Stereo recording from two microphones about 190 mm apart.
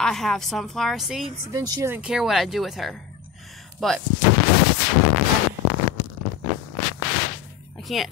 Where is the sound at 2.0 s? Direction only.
Centre (ahead or behind).